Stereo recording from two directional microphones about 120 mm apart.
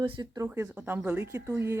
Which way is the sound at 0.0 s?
45° right (ahead or behind).